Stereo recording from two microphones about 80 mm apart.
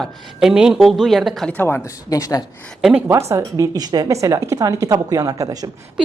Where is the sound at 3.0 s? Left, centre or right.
Right.